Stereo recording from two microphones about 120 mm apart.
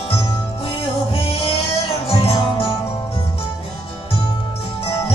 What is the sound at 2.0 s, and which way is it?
Music, 55° left (ahead or behind).